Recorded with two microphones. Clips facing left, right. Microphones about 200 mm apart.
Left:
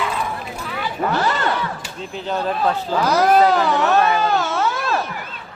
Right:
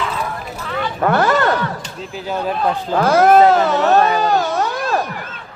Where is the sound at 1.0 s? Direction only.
55° right (ahead or behind).